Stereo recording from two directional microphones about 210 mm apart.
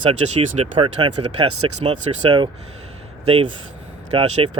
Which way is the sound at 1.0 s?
90° right.